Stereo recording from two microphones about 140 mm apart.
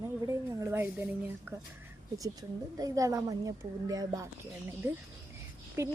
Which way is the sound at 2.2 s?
25° right (ahead or behind).